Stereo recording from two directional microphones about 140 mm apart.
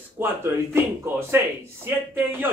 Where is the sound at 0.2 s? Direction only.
15° right (ahead or behind).